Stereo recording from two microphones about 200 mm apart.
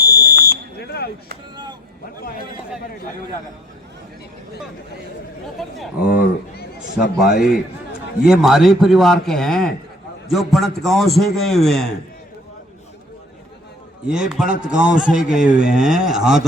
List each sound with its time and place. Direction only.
0.0 s smoke detector: 50° left (ahead or behind)
5.5 s a man's voice: centre (ahead or behind)
6.1 s a man's voice: 45° left (ahead or behind)
8.3 s a man's voice: centre (ahead or behind)
14.1 s a man's voice: 5° right (ahead or behind)